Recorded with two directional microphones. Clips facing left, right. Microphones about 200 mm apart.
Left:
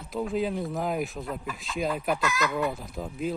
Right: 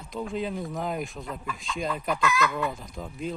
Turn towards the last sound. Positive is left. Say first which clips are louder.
# left 3 dB
turn(degrees=5)  # may be behind; listen again after turning